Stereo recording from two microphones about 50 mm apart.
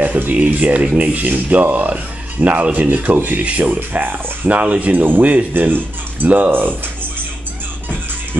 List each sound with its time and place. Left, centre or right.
0.0 s speech: right
4.9 s speech: right